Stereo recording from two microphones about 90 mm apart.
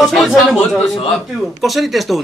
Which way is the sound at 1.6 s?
Centre (ahead or behind).